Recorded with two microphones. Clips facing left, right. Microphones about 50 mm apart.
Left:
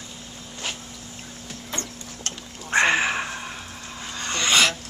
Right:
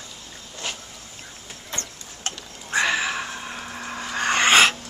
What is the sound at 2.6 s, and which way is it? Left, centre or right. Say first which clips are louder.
Sniff: left 3 dB; left.